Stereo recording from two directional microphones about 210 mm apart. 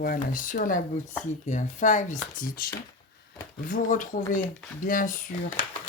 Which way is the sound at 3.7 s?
40° left (ahead or behind).